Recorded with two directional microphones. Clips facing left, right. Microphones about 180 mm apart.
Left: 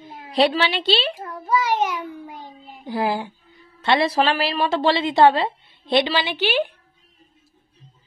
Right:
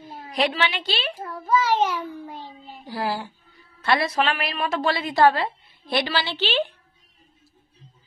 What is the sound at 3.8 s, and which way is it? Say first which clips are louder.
A woman's voice: left 3 dB; 25° left (ahead or behind).